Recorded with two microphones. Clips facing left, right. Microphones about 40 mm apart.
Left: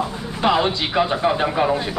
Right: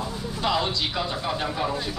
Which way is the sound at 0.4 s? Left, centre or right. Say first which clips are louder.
Left 7 dB; left.